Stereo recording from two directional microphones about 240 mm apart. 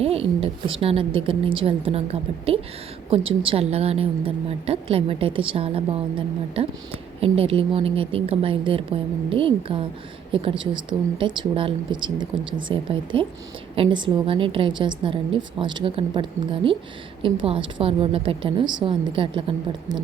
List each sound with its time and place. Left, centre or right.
0.0 s a woman's voice: right